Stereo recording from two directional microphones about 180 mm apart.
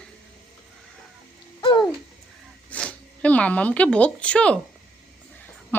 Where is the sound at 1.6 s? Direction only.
25° left (ahead or behind).